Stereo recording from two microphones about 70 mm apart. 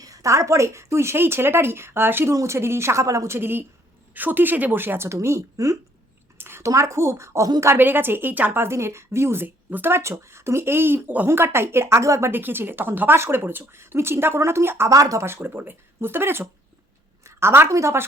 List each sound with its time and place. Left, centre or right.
0.0 s speech: right
2.3 s speech: right
3.3 s a woman's voice: right
6.3 s a sound: right
6.6 s speech: right
7.6 s speech: right
8.6 s speech: right
10.0 s speech: right
12.3 s speech: right
14.8 s speech: right
15.4 s speech: right
17.2 s a sound: right
17.7 s speech: right